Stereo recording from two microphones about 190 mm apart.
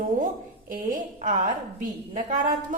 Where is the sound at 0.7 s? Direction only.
45° right (ahead or behind).